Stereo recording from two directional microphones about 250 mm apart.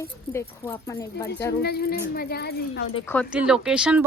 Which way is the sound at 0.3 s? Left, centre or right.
Centre.